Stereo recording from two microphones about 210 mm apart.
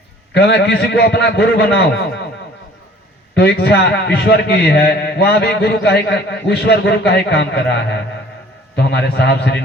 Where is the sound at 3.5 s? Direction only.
55° left (ahead or behind).